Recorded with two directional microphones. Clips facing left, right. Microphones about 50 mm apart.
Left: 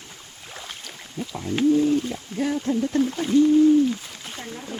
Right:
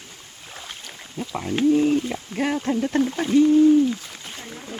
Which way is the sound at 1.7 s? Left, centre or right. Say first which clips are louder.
Right 1 dB; right.